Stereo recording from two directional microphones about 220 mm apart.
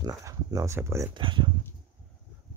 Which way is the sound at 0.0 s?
15° right (ahead or behind).